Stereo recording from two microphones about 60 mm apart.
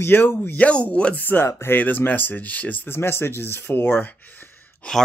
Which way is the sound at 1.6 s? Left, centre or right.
Left.